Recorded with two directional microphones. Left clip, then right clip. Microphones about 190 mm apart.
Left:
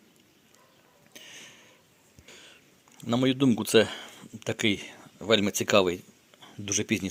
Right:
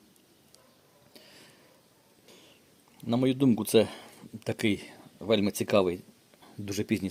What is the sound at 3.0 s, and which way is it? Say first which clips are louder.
Speech: left 1 dB; 5° right (ahead or behind).